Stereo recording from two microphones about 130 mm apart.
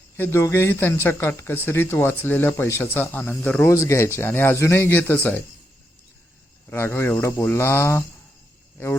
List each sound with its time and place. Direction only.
0.2 s speech: 20° left (ahead or behind)
6.7 s speech: 20° left (ahead or behind)